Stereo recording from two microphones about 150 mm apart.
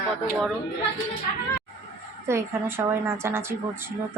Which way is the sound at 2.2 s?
15° right (ahead or behind).